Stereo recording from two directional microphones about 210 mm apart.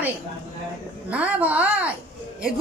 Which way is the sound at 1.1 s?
5° right (ahead or behind).